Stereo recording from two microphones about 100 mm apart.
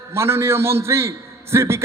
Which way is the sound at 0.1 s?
25° right (ahead or behind).